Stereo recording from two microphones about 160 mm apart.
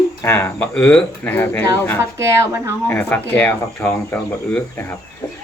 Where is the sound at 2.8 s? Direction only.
10° left (ahead or behind).